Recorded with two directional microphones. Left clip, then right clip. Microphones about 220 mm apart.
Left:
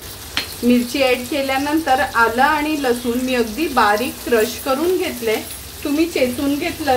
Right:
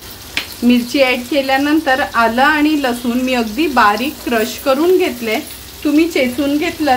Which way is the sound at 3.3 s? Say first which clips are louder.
Right 3 dB; 45° right (ahead or behind).